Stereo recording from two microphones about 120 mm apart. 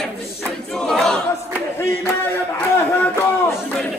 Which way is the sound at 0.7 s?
5° left (ahead or behind).